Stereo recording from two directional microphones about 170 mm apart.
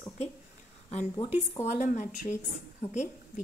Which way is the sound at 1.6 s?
45° left (ahead or behind).